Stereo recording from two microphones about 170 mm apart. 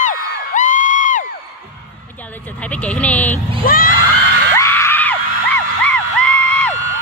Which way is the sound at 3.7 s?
60° left (ahead or behind).